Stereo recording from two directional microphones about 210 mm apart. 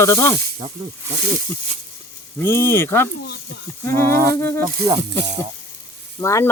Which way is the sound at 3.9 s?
45° right (ahead or behind).